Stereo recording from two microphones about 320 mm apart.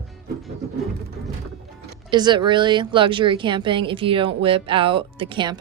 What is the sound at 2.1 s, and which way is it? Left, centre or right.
A woman's voice, centre.